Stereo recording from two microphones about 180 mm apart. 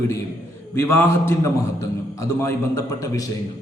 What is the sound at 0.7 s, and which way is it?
A man's voice, 15° left (ahead or behind).